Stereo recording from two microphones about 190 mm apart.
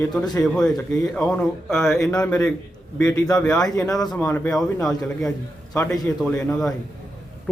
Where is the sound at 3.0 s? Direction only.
15° left (ahead or behind).